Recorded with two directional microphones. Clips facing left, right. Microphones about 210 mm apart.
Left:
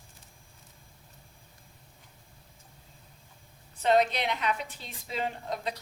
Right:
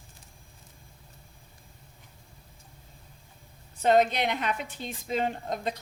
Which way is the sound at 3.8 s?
45° right (ahead or behind).